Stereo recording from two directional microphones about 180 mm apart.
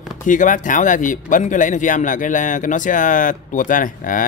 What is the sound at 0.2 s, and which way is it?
Speech, 45° left (ahead or behind).